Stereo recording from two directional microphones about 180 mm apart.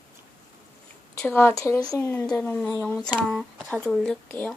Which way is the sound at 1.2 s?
10° left (ahead or behind).